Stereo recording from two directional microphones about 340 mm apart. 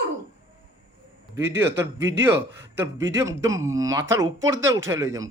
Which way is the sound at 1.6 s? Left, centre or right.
Centre.